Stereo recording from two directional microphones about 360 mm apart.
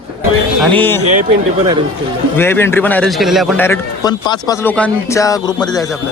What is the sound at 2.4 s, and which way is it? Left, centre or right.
Speech, centre.